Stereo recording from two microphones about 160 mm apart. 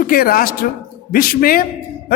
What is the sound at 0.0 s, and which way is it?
A man's voice, 65° left (ahead or behind).